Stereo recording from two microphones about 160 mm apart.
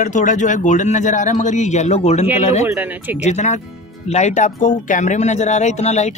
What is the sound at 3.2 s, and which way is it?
Speech, 45° left (ahead or behind).